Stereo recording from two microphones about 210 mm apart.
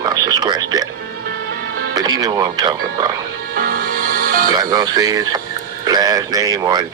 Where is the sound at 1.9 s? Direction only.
20° right (ahead or behind).